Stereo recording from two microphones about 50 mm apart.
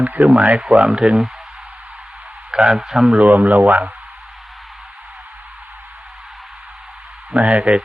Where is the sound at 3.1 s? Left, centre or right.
Right.